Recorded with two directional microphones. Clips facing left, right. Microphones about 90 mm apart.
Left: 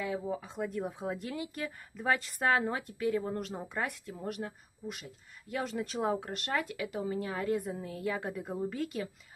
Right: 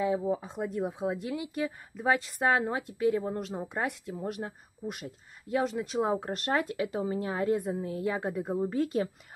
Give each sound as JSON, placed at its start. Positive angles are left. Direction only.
{"t": 0.0, "sound": "speech", "side_deg": -25}
{"t": 4.8, "sound": "speech", "side_deg": -40}
{"t": 5.5, "sound": "speech", "side_deg": -25}